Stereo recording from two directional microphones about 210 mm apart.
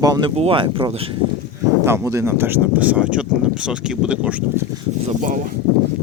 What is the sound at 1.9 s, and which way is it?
Speech, 15° right (ahead or behind).